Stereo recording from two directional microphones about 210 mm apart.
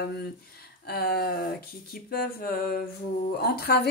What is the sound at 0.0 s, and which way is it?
Speech, 50° left (ahead or behind).